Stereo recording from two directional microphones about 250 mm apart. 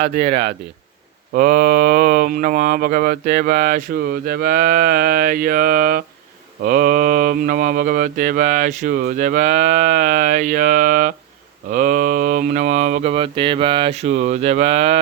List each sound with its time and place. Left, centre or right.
1.3 s speech: right